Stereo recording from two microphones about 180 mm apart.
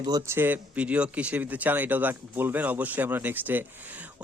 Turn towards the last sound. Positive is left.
turn(degrees=-10)  # may be behind; listen again after turning